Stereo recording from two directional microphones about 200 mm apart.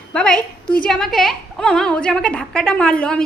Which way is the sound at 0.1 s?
5° left (ahead or behind).